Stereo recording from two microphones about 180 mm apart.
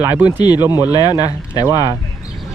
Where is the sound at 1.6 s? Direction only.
20° right (ahead or behind).